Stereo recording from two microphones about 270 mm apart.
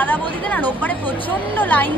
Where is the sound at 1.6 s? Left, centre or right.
Centre.